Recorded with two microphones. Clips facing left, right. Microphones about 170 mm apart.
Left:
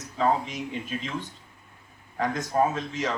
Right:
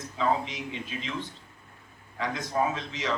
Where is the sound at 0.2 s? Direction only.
45° left (ahead or behind).